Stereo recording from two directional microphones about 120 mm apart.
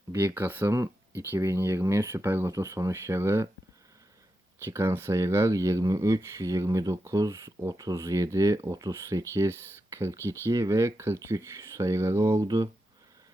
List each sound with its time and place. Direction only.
0.1 s speech: 20° right (ahead or behind)
4.6 s speech: 20° right (ahead or behind)